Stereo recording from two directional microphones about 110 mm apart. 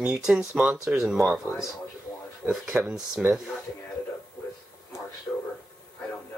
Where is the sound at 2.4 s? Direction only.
10° right (ahead or behind).